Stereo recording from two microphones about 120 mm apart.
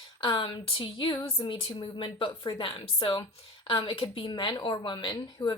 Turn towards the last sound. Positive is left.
turn(degrees=35)  # may be behind; listen again after turning